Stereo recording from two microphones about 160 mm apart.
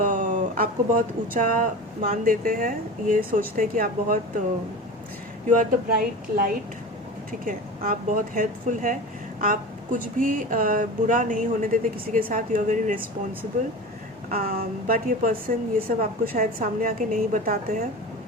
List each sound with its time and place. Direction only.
0.0 s speech: 55° right (ahead or behind)
5.5 s speech: 60° right (ahead or behind)
14.3 s speech: 65° right (ahead or behind)